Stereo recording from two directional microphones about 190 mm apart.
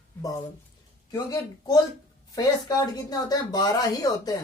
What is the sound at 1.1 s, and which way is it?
Speech, 20° left (ahead or behind).